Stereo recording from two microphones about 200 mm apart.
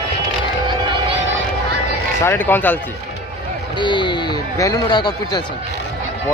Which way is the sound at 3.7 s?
25° left (ahead or behind).